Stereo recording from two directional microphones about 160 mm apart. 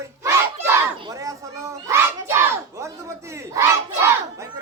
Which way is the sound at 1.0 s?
20° right (ahead or behind).